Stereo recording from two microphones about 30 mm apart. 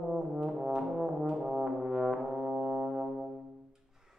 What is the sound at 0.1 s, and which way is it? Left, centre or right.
Brass instrument, centre.